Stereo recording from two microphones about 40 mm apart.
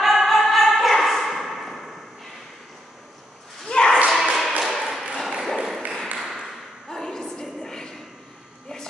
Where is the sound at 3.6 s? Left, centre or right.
Centre.